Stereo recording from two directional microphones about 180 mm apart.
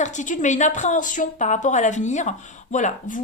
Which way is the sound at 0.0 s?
40° left (ahead or behind).